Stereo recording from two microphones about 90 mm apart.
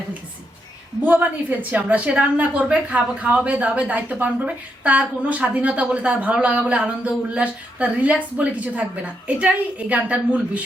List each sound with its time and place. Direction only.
1.0 s a woman's voice: 20° right (ahead or behind)